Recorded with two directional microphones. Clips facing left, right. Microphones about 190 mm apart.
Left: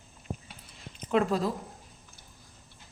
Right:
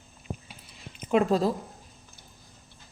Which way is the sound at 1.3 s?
30° right (ahead or behind).